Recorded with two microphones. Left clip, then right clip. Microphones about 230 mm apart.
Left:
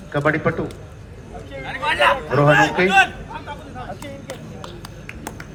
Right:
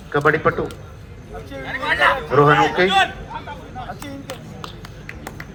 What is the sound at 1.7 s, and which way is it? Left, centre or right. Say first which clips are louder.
Hubbub: even; centre.